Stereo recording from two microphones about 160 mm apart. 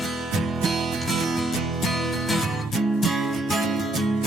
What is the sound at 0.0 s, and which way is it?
Music, centre (ahead or behind).